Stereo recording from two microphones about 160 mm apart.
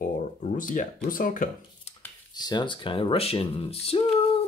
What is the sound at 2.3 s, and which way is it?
Speech, 25° left (ahead or behind).